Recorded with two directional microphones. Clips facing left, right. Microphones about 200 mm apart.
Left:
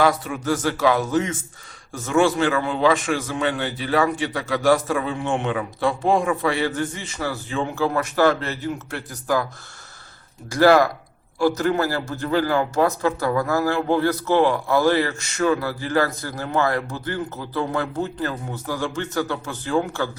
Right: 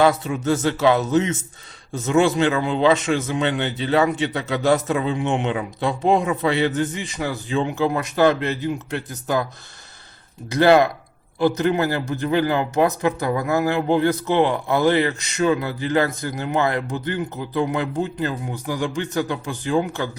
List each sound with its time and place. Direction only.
0.0 s a man's voice: 25° right (ahead or behind)
10.5 s a man's voice: 20° right (ahead or behind)